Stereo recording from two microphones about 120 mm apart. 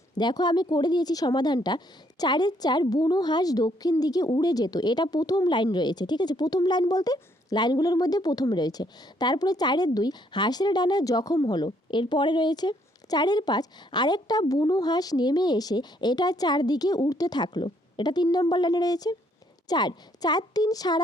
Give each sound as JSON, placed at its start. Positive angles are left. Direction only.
{"t": 0.2, "sound": "speech", "side_deg": 35}